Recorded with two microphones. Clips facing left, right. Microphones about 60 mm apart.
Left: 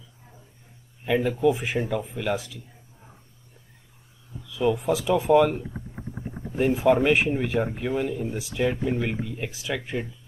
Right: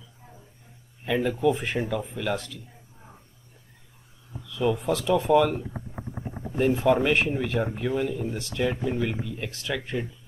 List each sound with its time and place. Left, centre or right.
1.0 s speech: centre
4.5 s speech: centre